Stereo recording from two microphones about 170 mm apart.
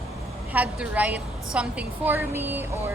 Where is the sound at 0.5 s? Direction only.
10° right (ahead or behind).